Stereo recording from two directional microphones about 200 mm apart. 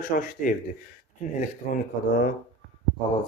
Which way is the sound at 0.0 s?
45° left (ahead or behind).